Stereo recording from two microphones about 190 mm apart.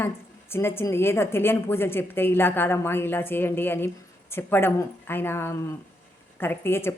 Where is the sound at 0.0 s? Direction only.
10° left (ahead or behind).